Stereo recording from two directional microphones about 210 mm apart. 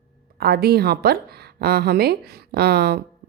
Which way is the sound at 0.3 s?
50° right (ahead or behind).